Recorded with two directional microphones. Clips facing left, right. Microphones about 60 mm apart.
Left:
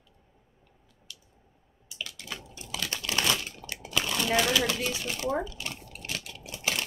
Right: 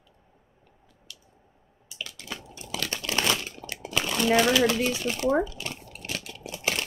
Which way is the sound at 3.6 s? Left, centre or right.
Right.